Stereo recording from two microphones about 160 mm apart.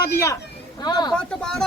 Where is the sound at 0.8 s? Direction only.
25° left (ahead or behind).